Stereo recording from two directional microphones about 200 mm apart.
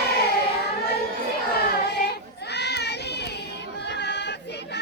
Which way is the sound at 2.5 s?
55° left (ahead or behind).